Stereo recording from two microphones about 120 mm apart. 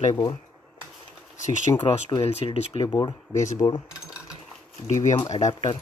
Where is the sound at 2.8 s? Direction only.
35° left (ahead or behind).